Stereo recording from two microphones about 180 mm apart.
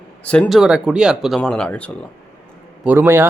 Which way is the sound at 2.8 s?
10° right (ahead or behind).